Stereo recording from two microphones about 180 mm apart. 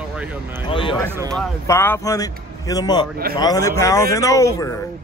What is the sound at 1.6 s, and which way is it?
A man's voice, 15° left (ahead or behind).